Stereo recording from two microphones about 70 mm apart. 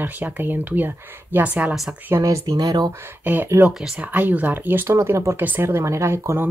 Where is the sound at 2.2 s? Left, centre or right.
Right.